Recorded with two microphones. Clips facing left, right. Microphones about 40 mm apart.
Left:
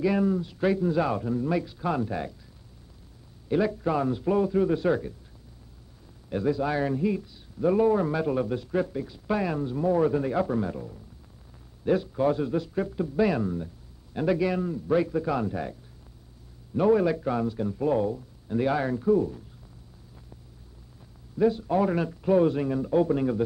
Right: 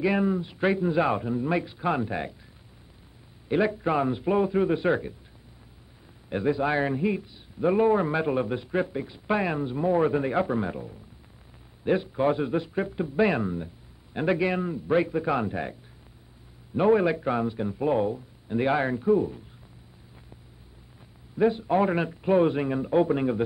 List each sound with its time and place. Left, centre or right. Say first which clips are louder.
0.0 s a man's voice: even; right
3.4 s a man's voice: right 1 dB; right
6.2 s a man's voice: right 1 dB; right
21.4 s a man's voice: right 1 dB; right